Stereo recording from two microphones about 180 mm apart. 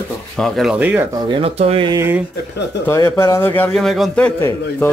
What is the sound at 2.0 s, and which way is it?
Speech, 10° right (ahead or behind).